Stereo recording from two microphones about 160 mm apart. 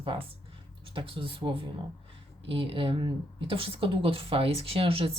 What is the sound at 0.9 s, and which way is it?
Speech, 35° right (ahead or behind).